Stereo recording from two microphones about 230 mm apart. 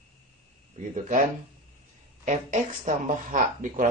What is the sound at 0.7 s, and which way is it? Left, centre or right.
Speech, right.